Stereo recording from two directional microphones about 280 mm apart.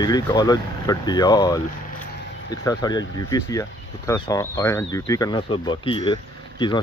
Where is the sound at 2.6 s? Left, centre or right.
Centre.